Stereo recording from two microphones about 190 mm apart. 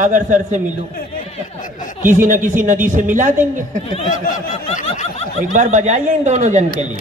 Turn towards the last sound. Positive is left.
turn(degrees=-40)  # may be behind; listen again after turning